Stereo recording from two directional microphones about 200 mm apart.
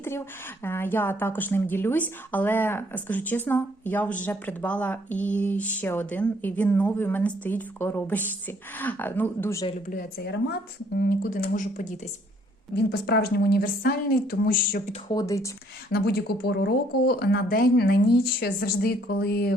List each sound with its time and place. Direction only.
0.6 s speech: 10° left (ahead or behind)
9.8 s speech: 45° left (ahead or behind)
12.7 s speech: 50° left (ahead or behind)
15.1 s speech: 15° left (ahead or behind)
15.9 s speech: 55° left (ahead or behind)